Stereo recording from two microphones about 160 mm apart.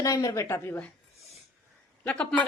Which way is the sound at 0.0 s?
20° left (ahead or behind).